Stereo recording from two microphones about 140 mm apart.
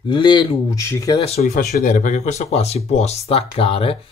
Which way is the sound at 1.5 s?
60° left (ahead or behind).